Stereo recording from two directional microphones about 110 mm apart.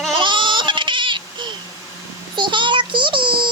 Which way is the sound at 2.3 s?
45° right (ahead or behind).